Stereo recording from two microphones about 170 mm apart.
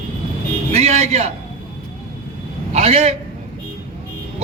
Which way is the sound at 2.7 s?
35° right (ahead or behind).